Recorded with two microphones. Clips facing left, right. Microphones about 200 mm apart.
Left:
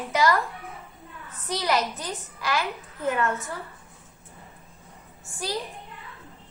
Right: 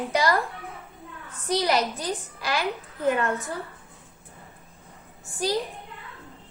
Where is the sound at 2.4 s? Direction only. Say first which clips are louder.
Left 1 dB; 35° right (ahead or behind).